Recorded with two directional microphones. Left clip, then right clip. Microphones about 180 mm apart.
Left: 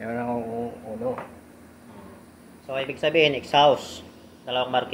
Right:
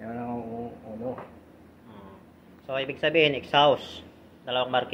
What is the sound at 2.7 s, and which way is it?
A man's voice, 5° left (ahead or behind).